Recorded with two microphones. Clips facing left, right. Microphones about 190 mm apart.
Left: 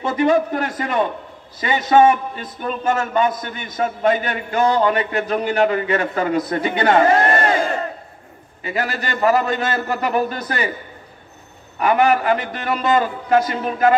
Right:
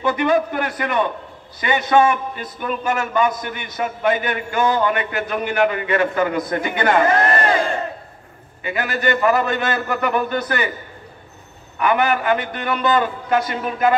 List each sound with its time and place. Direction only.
0.0 s a man's voice: 25° left (ahead or behind)
8.6 s a man's voice: 35° left (ahead or behind)
11.8 s a man's voice: 35° left (ahead or behind)